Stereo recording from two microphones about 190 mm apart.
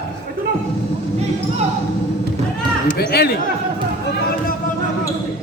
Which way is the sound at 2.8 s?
55° left (ahead or behind).